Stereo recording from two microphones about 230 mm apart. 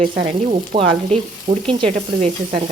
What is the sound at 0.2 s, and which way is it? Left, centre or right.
Frying, right.